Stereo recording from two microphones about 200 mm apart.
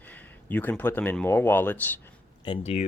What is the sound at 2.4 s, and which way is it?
Speech, 30° left (ahead or behind).